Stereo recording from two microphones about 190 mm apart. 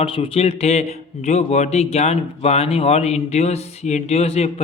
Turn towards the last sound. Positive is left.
turn(degrees=35)  # may be behind; listen again after turning